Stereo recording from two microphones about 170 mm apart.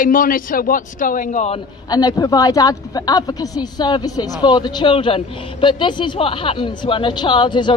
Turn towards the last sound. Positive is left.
turn(degrees=25)  # may be behind; listen again after turning